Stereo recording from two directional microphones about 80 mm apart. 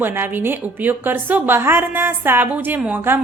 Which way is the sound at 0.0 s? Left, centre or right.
Right.